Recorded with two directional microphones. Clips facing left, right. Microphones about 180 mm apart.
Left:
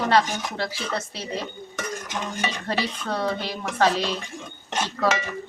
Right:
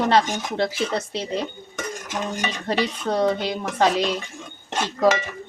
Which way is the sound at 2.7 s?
20° right (ahead or behind).